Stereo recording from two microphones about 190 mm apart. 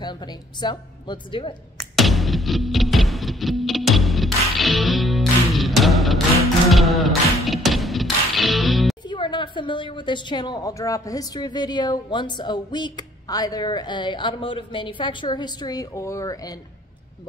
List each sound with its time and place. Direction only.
0.0 s a woman's voice: 20° left (ahead or behind)
2.0 s music: centre (ahead or behind)
9.0 s a woman's voice: 25° left (ahead or behind)